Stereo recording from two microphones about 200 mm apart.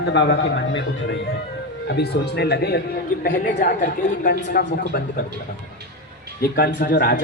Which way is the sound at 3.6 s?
40° left (ahead or behind).